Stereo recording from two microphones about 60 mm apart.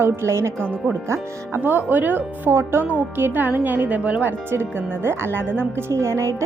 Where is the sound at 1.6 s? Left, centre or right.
Right.